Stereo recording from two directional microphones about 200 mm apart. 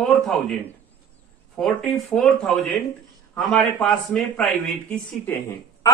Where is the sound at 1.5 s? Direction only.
Centre (ahead or behind).